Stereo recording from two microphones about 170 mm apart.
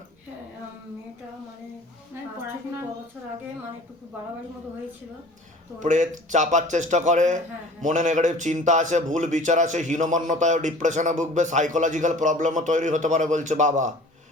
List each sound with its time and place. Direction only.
5.8 s a man's voice: 45° right (ahead or behind)